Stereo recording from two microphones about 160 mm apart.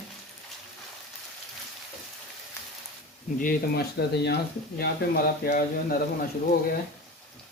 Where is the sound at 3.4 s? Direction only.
80° left.